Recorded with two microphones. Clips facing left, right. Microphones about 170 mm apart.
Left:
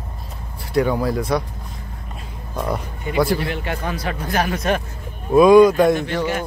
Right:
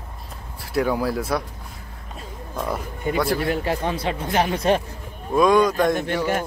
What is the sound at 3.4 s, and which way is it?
Speech, 40° right (ahead or behind).